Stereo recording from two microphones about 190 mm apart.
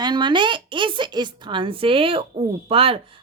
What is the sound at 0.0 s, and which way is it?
A woman's voice, 25° right (ahead or behind).